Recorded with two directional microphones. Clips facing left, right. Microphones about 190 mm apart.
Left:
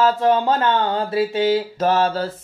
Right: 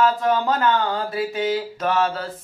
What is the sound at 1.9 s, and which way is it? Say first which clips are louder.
Mantra: left 3 dB; 35° left (ahead or behind).